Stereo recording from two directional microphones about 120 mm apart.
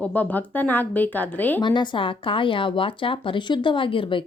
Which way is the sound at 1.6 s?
40° left (ahead or behind).